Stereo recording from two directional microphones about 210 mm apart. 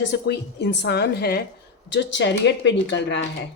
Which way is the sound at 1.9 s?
60° left (ahead or behind).